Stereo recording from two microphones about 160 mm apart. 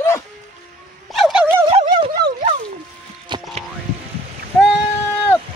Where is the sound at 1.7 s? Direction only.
35° right (ahead or behind).